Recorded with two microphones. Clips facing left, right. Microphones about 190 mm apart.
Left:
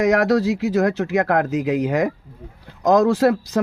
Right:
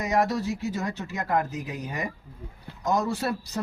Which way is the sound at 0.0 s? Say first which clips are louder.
Left 9 dB; 90° left.